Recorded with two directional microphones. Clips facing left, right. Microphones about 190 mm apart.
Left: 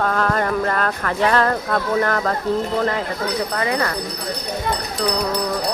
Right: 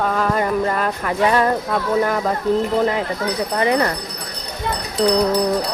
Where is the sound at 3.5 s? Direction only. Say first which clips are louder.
Right 4 dB; 25° right (ahead or behind).